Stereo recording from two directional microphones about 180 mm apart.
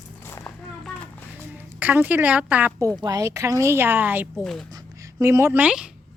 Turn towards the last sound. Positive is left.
turn(degrees=-5)  # may be behind; listen again after turning